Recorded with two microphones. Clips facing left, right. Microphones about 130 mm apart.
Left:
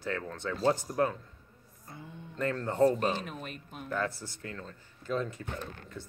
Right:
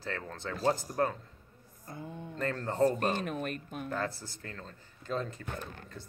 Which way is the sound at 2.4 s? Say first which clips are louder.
Left 2 dB; 35° right (ahead or behind).